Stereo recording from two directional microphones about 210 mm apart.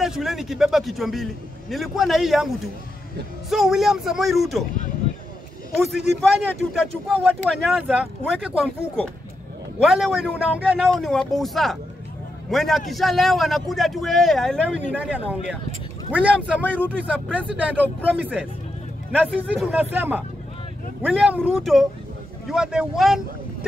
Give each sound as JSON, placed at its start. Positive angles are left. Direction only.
{"t": 0.0, "sound": "speech", "side_deg": 0}
{"t": 6.2, "sound": "speech", "side_deg": 0}
{"t": 19.5, "sound": "speech", "side_deg": -5}